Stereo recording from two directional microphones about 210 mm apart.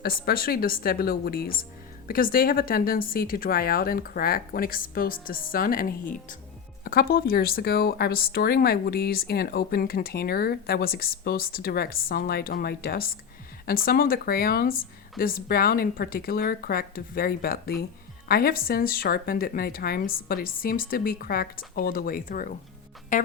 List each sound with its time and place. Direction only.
0.0 s speech: 45° left (ahead or behind)
23.1 s music: 35° left (ahead or behind)